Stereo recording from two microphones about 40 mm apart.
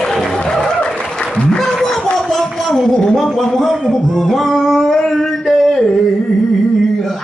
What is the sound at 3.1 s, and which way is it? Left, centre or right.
Speech, centre.